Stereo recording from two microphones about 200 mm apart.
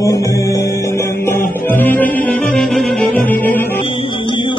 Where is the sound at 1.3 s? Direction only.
10° left (ahead or behind).